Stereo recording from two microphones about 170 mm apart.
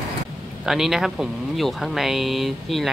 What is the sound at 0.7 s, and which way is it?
Speech, 5° right (ahead or behind).